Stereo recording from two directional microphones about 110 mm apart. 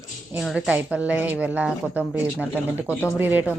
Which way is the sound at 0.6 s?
10° right (ahead or behind).